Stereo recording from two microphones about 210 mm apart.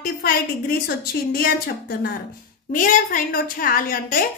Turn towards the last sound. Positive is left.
turn(degrees=40)  # may be behind; listen again after turning